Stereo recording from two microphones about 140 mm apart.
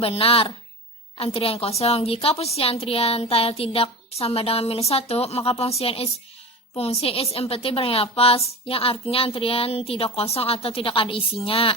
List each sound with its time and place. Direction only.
0.0 s a woman's voice: 45° left (ahead or behind)